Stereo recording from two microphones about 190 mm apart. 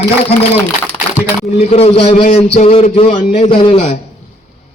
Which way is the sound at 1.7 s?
30° left (ahead or behind).